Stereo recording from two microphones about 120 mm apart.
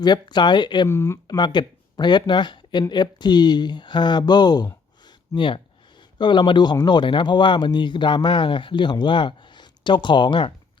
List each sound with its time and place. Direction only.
0.0 s speech: 35° left (ahead or behind)
0.9 s speech: 20° left (ahead or behind)
1.4 s speech: 40° left (ahead or behind)